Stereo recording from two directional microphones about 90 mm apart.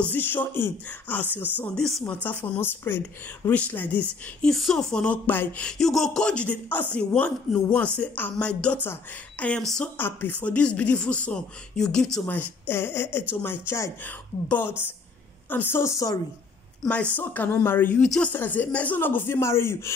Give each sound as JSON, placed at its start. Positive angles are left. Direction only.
{"t": 0.1, "sound": "speech", "side_deg": 20}
{"t": 1.8, "sound": "speech", "side_deg": 5}
{"t": 2.2, "sound": "speech", "side_deg": 15}
{"t": 4.5, "sound": "speech", "side_deg": 5}
{"t": 5.7, "sound": "speech", "side_deg": 5}
{"t": 9.9, "sound": "speech", "side_deg": 20}
{"t": 12.3, "sound": "speech", "side_deg": 25}
{"t": 14.0, "sound": "a woman's voice", "side_deg": 20}
{"t": 17.1, "sound": "speech", "side_deg": 20}
{"t": 17.9, "sound": "speech", "side_deg": 10}
{"t": 18.3, "sound": "speech", "side_deg": 20}